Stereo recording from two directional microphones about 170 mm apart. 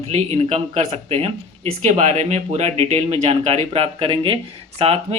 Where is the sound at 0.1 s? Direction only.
40° right (ahead or behind).